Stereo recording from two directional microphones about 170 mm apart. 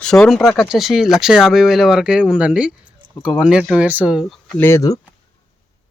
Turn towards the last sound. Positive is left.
turn(degrees=20)  # may be behind; listen again after turning